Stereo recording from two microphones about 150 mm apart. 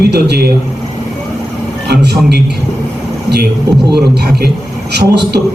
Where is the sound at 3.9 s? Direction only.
90° right.